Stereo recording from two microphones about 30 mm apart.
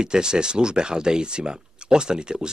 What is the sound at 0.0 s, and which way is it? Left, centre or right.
Speech, right.